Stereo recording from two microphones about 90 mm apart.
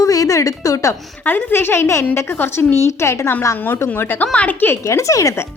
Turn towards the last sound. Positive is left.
turn(degrees=40)  # may be behind; listen again after turning